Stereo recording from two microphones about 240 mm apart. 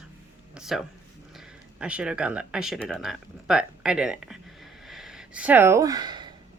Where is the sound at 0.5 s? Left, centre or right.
Centre.